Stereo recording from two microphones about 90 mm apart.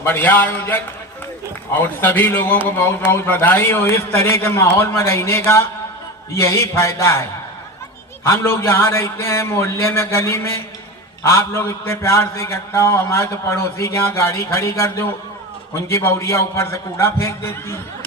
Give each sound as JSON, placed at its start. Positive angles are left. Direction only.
{"t": 0.0, "sound": "a man's voice", "side_deg": 20}